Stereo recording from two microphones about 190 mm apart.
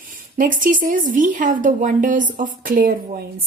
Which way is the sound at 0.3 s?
45° right (ahead or behind).